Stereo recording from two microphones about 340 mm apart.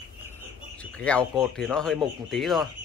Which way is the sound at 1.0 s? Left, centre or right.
Centre.